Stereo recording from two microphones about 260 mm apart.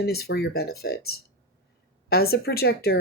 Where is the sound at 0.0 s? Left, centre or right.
Left.